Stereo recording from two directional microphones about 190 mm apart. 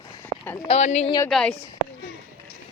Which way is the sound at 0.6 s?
35° left (ahead or behind).